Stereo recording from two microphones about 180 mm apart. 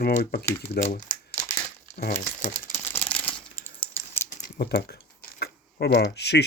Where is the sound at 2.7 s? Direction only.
10° left (ahead or behind).